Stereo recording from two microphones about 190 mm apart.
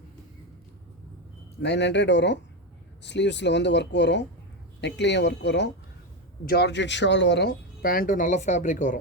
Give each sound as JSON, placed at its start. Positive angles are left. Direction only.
{"t": 1.6, "sound": "speech", "side_deg": 65}